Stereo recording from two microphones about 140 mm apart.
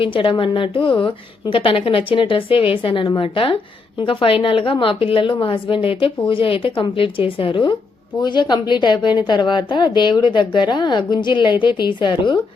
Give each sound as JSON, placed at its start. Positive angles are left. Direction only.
{"t": 0.0, "sound": "a woman's voice", "side_deg": 40}